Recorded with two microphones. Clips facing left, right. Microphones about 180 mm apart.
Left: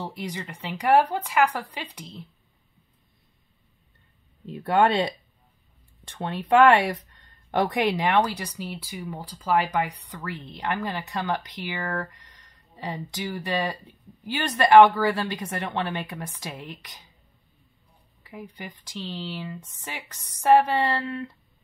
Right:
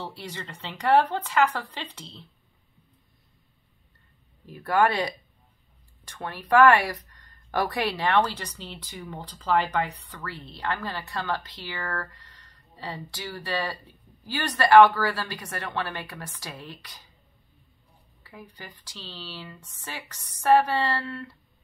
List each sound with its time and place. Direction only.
0.0 s speech: 15° left (ahead or behind)
4.5 s speech: 25° left (ahead or behind)
18.2 s speech: 15° left (ahead or behind)